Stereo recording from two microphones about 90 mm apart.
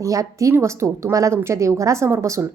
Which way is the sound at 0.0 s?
40° right (ahead or behind).